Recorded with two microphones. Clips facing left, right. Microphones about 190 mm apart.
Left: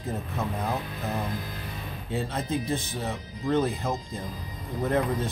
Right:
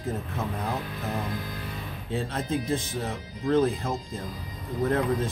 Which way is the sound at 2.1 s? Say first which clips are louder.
Even; 5° left (ahead or behind).